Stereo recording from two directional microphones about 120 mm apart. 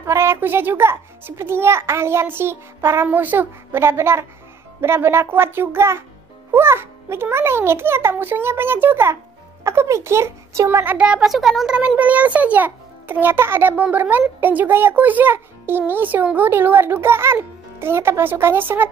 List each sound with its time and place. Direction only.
0.0 s a child's voice: 20° right (ahead or behind)